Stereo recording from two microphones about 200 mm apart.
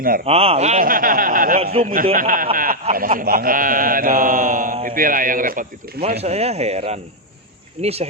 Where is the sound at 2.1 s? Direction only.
45° right (ahead or behind).